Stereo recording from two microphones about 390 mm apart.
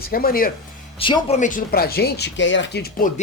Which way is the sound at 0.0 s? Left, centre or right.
Left.